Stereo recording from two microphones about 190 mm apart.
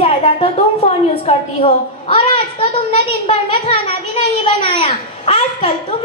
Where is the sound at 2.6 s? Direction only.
60° right (ahead or behind).